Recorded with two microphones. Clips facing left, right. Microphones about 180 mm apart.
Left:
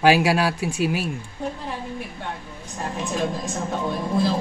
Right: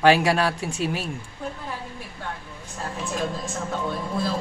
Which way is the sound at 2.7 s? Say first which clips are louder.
Left 3 dB; 15° left (ahead or behind).